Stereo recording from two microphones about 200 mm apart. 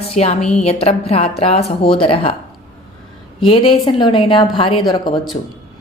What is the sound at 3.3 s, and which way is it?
Speech, 25° left (ahead or behind).